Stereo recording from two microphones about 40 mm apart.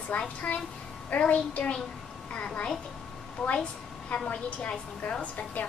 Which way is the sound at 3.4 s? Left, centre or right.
Centre.